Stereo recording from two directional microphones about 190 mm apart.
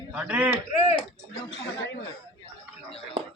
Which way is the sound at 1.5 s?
65° left (ahead or behind).